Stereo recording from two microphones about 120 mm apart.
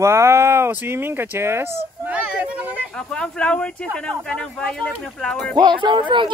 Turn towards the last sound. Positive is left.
turn(degrees=-40)  # may be behind; listen again after turning